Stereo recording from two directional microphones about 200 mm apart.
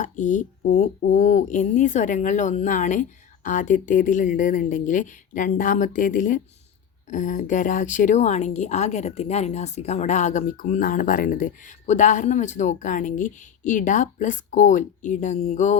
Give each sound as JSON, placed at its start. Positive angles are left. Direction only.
{"t": 0.0, "sound": "speech", "side_deg": 40}